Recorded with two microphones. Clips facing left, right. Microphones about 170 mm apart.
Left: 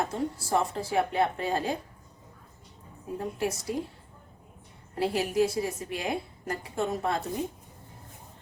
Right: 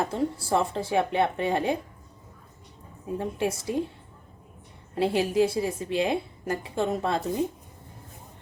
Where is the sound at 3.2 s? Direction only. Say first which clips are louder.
Right 2 dB; 25° right (ahead or behind).